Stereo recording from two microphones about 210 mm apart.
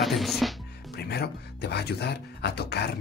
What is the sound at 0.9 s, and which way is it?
Speech, 50° left (ahead or behind).